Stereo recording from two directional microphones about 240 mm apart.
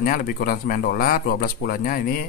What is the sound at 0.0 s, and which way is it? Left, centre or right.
A man's voice, left.